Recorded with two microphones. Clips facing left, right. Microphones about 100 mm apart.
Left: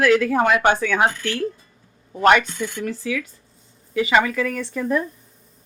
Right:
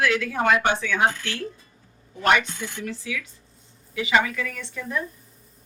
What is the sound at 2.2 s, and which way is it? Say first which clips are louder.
Speech: left 5 dB; 50° left (ahead or behind).